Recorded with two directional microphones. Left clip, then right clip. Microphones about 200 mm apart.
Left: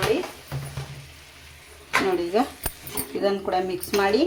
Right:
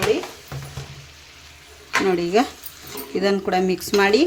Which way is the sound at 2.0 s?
30° right (ahead or behind).